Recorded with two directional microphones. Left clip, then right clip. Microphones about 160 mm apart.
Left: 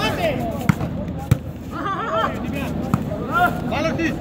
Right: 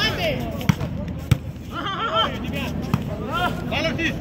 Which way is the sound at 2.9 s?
5° right (ahead or behind).